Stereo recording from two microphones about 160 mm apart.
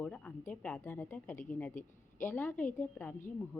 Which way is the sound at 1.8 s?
55° left (ahead or behind).